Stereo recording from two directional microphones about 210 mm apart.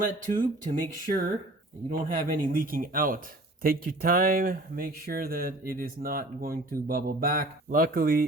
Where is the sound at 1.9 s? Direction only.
40° right (ahead or behind).